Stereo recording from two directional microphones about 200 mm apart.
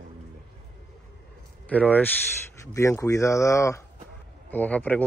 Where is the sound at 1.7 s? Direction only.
5° left (ahead or behind).